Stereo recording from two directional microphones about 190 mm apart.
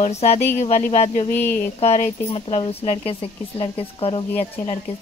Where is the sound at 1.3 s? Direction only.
10° left (ahead or behind).